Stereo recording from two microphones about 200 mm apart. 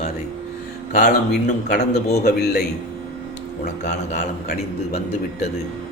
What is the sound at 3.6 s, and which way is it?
Speech, 35° left (ahead or behind).